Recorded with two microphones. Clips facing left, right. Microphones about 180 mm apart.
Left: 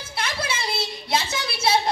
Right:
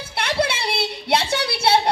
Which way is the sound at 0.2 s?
65° right (ahead or behind).